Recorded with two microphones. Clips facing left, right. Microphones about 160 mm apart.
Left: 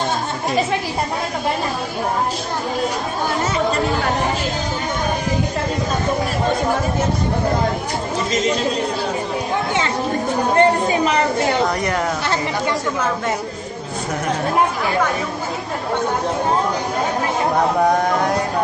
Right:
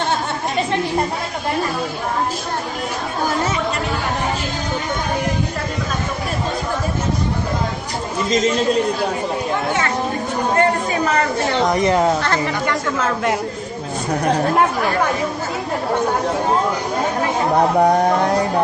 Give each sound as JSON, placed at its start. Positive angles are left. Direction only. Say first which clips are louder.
{"t": 10.6, "sound": "speech", "louder": "left 4 dB", "side_deg": 20}
{"t": 11.6, "sound": "speech", "louder": "right 4 dB", "side_deg": -20}